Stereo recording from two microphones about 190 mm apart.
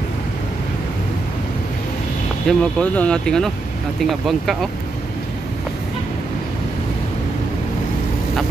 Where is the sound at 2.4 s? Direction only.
5° left (ahead or behind).